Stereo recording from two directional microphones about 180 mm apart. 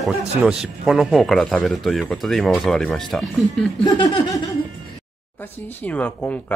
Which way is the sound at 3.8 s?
25° left (ahead or behind).